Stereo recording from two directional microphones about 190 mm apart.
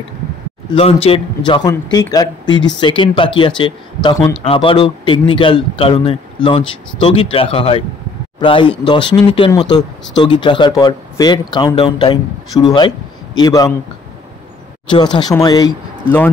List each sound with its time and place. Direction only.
1.0 s a man's voice: 25° left (ahead or behind)
15.1 s a man's voice: 20° left (ahead or behind)